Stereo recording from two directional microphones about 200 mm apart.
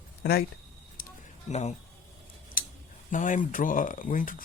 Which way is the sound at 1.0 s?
45° left (ahead or behind).